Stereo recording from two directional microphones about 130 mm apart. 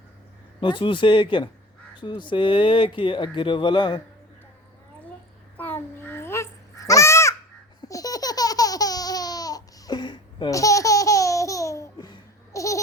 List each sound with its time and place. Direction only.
0.6 s speech: 40° left (ahead or behind)
5.5 s babbling: 15° left (ahead or behind)
7.8 s baby laughter: 25° left (ahead or behind)
12.5 s a sound: 25° left (ahead or behind)